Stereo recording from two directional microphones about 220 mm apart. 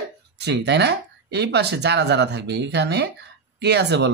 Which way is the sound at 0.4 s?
50° right (ahead or behind).